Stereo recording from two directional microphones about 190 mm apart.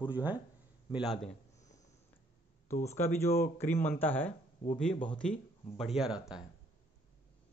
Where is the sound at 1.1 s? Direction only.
30° left (ahead or behind).